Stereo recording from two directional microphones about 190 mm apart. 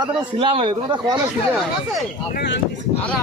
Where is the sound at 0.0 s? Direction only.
25° right (ahead or behind).